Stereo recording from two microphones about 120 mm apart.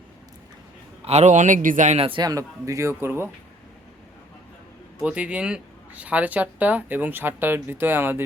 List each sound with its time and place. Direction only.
1.0 s a man's voice: 70° right (ahead or behind); by 2.0 s 90° right
2.0 s a man's voice: 50° right (ahead or behind)
2.2 s a man's voice: 25° right (ahead or behind)
5.0 s speech: 10° right (ahead or behind)